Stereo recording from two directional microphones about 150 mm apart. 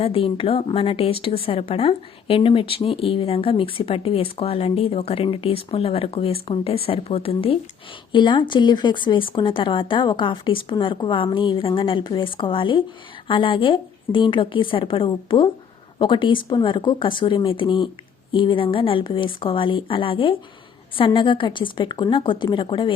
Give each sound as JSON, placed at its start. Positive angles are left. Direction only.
{"t": 0.0, "sound": "a woman's voice", "side_deg": 40}